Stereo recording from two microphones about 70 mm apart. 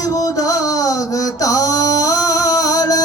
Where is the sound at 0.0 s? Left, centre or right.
Left.